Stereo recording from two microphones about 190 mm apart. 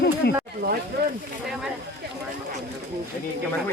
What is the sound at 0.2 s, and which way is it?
Snake, 60° left (ahead or behind).